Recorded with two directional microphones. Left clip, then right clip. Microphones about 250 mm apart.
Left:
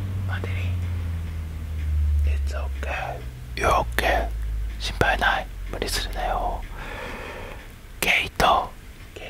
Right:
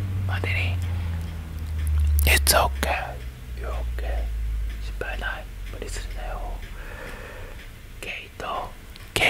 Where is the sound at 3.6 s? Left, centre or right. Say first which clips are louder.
Left 16 dB; left.